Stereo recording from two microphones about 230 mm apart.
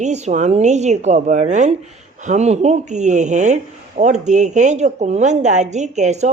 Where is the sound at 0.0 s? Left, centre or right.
Right.